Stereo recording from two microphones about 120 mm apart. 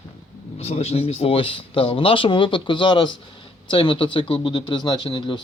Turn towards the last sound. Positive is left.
turn(degrees=40)  # may be behind; listen again after turning